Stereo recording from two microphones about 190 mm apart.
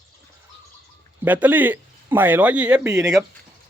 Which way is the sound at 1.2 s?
10° right (ahead or behind).